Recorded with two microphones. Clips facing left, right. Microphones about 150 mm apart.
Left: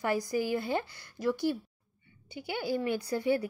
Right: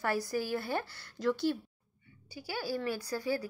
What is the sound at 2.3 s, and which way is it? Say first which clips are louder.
A woman's voice: left 4 dB; 20° left (ahead or behind).